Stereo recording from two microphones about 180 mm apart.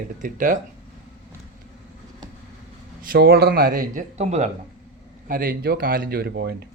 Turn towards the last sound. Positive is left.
turn(degrees=-65)  # may be behind; listen again after turning